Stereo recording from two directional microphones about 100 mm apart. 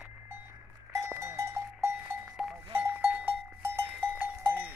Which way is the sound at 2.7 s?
20° right (ahead or behind).